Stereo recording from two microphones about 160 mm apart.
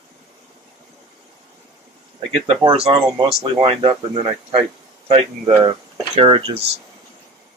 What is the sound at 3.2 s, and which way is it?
Speech, 35° right (ahead or behind).